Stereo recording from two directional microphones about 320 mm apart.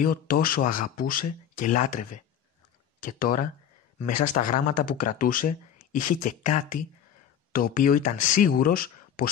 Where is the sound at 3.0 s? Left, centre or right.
Left.